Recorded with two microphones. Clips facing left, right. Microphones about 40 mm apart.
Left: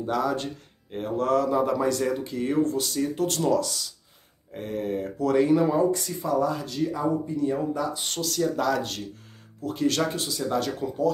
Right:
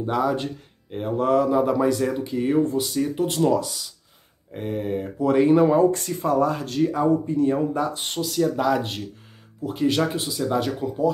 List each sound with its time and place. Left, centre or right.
0.0 s speech: centre
5.5 s speech: right
8.1 s speech: centre